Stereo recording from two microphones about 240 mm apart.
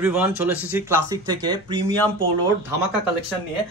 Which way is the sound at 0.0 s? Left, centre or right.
Centre.